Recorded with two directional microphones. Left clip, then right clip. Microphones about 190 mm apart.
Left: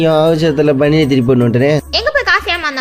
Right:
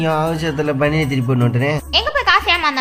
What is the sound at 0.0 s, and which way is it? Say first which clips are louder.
A woman's voice: left 8 dB; 30° left (ahead or behind).